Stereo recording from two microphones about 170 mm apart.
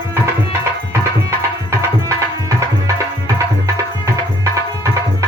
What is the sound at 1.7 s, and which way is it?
Tabla, 15° right (ahead or behind).